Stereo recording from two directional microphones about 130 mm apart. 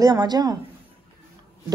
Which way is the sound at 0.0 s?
30° right (ahead or behind).